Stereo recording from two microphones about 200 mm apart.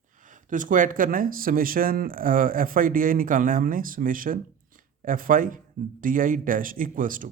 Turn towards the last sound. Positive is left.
turn(degrees=-45)  # may be behind; listen again after turning